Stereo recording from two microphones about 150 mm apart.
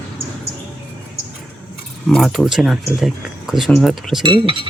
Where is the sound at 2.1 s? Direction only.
Centre (ahead or behind).